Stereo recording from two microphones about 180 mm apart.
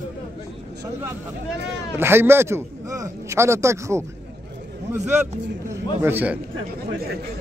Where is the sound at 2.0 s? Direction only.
15° right (ahead or behind).